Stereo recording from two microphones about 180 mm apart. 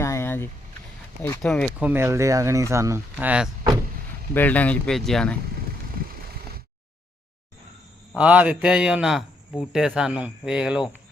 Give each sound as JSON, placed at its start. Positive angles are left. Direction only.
{"t": 0.0, "sound": "vehicle", "side_deg": 15}
{"t": 1.4, "sound": "speech", "side_deg": 5}
{"t": 1.8, "sound": "speech", "side_deg": -10}
{"t": 4.4, "sound": "speech", "side_deg": 10}
{"t": 8.1, "sound": "speech", "side_deg": -5}